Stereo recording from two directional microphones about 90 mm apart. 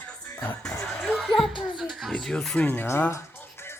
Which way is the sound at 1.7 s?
Centre (ahead or behind).